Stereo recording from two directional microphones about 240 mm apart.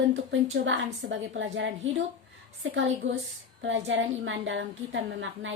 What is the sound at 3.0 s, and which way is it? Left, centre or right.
A woman's voice, right.